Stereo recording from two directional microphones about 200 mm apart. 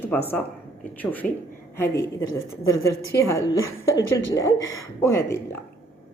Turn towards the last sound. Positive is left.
turn(degrees=15)  # may be behind; listen again after turning